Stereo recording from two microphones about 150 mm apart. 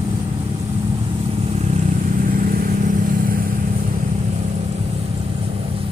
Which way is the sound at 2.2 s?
70° right (ahead or behind).